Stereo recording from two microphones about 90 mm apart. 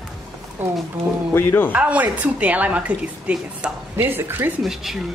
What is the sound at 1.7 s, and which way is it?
A woman's voice, 15° right (ahead or behind).